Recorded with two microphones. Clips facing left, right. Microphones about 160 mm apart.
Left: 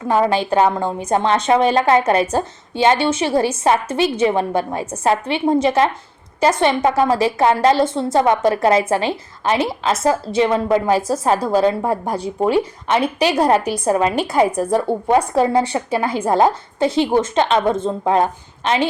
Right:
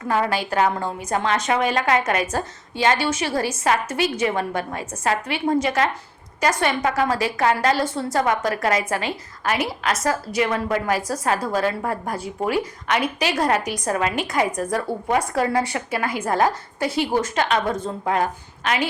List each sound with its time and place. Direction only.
0.0 s a woman's voice: 25° left (ahead or behind)